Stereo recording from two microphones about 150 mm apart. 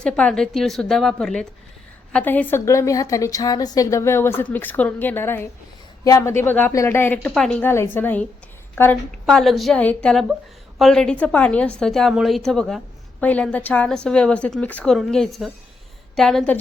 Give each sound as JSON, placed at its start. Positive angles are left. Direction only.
{"t": 0.0, "sound": "a woman's voice", "side_deg": 5}